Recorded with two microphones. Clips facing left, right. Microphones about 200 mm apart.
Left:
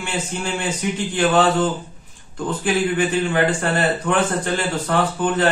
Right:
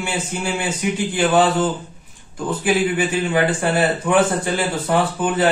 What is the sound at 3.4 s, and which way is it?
Speech, 10° right (ahead or behind).